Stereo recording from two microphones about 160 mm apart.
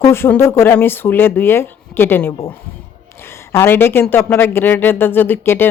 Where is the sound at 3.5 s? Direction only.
15° left (ahead or behind).